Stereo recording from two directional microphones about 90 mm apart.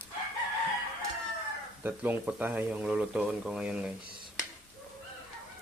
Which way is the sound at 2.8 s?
10° right (ahead or behind).